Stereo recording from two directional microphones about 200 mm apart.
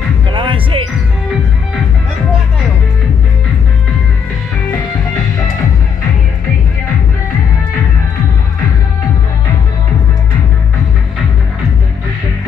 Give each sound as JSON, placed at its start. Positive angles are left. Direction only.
{"t": 0.3, "sound": "music", "side_deg": -25}